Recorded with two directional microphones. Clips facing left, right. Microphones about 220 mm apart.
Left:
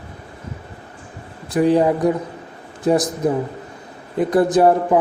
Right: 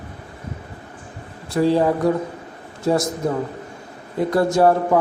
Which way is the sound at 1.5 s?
15° left (ahead or behind).